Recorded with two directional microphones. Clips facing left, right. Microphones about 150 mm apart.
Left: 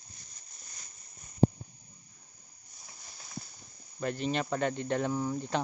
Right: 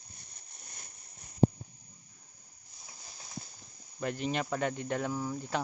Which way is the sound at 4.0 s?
15° right (ahead or behind).